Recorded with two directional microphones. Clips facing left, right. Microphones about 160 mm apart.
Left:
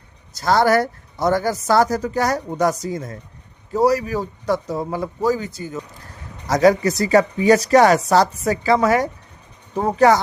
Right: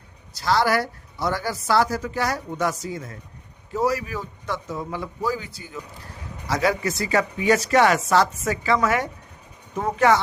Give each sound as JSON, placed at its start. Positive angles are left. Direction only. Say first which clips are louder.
{"t": 0.3, "sound": "a woman's voice", "louder": "left 5 dB", "side_deg": 50}